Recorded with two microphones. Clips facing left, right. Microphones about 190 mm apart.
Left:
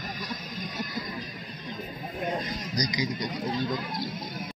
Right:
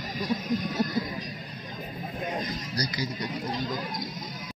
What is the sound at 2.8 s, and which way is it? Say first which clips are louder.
Speech: left 3 dB; 15° left (ahead or behind).